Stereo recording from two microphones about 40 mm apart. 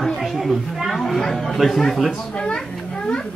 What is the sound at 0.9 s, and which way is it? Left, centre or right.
Speech, centre.